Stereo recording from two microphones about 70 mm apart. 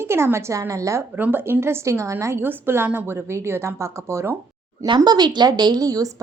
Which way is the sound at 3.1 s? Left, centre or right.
Right.